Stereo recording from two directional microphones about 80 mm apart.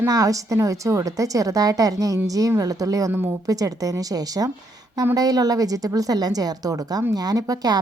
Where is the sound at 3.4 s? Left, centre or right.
Right.